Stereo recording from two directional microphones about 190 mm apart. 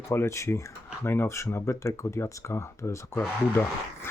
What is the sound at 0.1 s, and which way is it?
Speech, 15° left (ahead or behind).